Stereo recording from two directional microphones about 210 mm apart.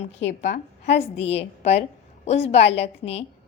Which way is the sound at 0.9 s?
30° left (ahead or behind).